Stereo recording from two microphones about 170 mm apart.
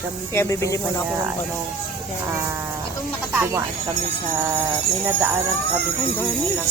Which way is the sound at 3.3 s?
10° right (ahead or behind).